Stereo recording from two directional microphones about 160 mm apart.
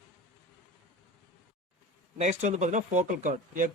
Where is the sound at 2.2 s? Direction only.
45° right (ahead or behind).